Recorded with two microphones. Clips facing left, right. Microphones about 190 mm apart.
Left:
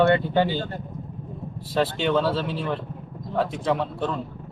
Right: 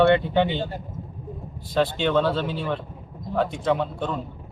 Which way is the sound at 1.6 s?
5° left (ahead or behind).